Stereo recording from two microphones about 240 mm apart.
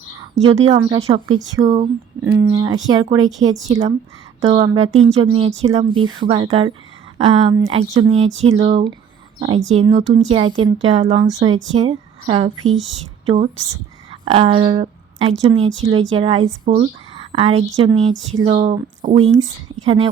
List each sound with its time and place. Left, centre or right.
0.4 s speech: right
1.7 s speech: centre
9.8 s speech: centre
11.2 s a woman's voice: centre